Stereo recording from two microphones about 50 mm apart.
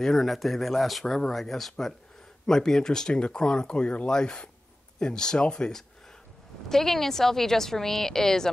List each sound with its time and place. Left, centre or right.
0.0 s a woman's voice: centre